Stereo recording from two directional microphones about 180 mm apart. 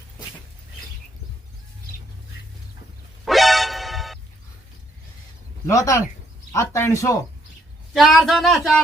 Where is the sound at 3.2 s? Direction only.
Centre (ahead or behind).